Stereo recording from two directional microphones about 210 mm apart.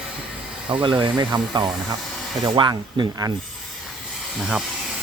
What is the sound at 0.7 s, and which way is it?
Speech, 20° right (ahead or behind).